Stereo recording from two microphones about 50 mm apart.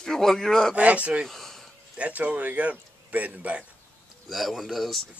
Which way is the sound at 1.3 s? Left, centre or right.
Centre.